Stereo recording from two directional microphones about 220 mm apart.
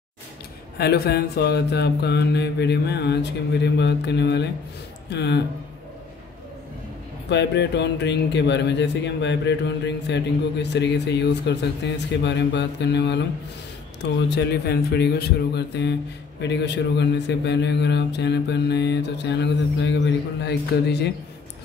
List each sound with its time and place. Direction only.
0.7 s speech: 45° left (ahead or behind)
7.2 s speech: 50° left (ahead or behind)
14.3 s speech: 50° left (ahead or behind)